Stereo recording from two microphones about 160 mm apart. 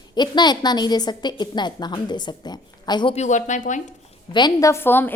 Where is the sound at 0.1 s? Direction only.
25° left (ahead or behind).